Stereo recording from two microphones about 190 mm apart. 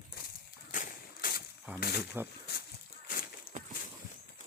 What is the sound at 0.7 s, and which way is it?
Whip, 45° left (ahead or behind).